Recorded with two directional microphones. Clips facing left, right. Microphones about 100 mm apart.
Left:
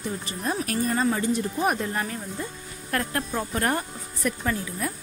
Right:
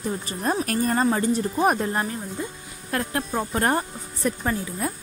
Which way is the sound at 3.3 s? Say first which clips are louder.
Right 4 dB; 30° right (ahead or behind).